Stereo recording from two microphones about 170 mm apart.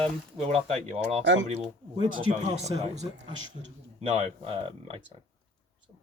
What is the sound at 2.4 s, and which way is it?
Speech, 40° right (ahead or behind).